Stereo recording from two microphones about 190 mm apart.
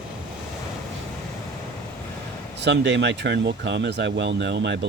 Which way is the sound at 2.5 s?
65° right (ahead or behind).